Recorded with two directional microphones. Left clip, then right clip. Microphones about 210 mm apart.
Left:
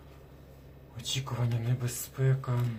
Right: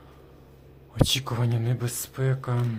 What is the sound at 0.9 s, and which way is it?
Speech, 50° right (ahead or behind).